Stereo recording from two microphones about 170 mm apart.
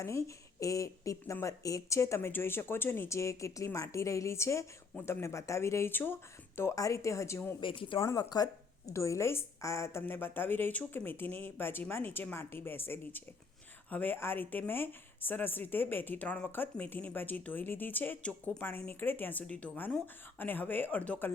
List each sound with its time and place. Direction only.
0.0 s speech: 15° left (ahead or behind)
7.6 s speech: 30° left (ahead or behind)
7.9 s speech: 20° left (ahead or behind)